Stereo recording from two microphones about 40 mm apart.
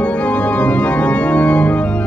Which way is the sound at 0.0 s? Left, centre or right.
Left.